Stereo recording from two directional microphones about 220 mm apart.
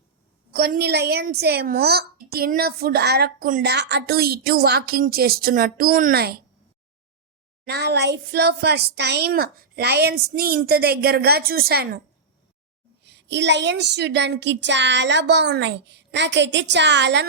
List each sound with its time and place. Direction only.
0.5 s a woman's voice: 45° right (ahead or behind)
7.6 s a woman's voice: 50° right (ahead or behind)
13.0 s a woman's voice: 50° right (ahead or behind)